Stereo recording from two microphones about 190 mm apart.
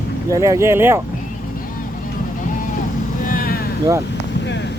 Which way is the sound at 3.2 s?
50° left (ahead or behind).